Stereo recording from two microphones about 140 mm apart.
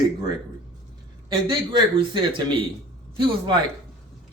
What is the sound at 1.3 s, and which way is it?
Speech, 35° right (ahead or behind).